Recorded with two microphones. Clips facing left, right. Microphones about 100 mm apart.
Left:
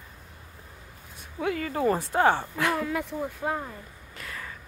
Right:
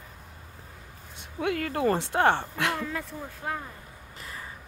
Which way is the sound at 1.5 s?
60° right (ahead or behind).